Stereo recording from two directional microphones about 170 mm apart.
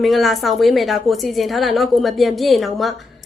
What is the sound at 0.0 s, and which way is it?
A woman's voice, centre (ahead or behind).